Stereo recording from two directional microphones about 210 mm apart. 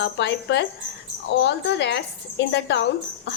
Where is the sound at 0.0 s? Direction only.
55° left (ahead or behind).